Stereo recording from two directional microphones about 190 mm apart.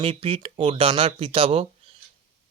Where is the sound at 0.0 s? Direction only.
30° right (ahead or behind).